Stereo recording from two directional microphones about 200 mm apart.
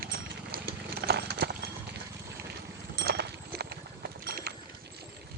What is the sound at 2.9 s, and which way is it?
Clip-clop, 55° right (ahead or behind).